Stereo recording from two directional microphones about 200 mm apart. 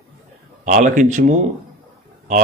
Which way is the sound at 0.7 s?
40° right (ahead or behind).